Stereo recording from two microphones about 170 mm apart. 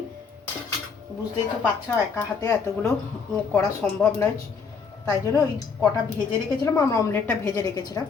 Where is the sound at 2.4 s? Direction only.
15° left (ahead or behind).